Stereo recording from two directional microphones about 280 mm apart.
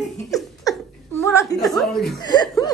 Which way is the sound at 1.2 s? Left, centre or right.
Centre.